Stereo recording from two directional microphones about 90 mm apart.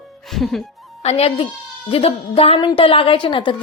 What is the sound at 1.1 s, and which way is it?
A woman's voice, 90° left.